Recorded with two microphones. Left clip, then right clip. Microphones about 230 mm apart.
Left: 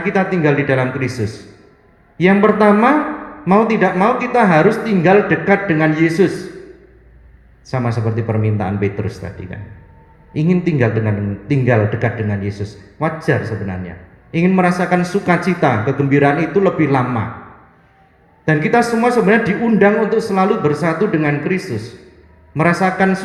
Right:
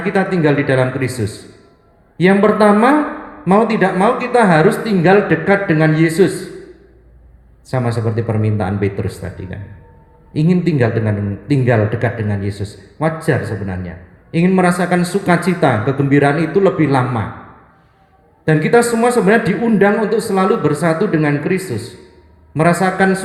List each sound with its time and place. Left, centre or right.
0.0 s a man's voice: right
2.1 s a man's voice: right
7.7 s a man's voice: right
18.4 s a man's voice: right